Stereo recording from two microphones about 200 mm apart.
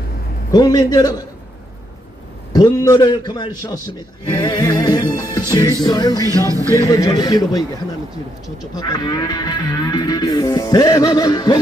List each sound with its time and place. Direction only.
0.5 s music: 20° left (ahead or behind)
2.5 s music: 20° left (ahead or behind)
6.2 s music: 15° right (ahead or behind)
6.8 s music: 15° left (ahead or behind)
8.7 s music: 20° left (ahead or behind)